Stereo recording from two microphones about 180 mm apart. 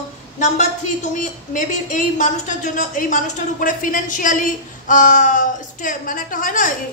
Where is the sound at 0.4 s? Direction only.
40° left (ahead or behind).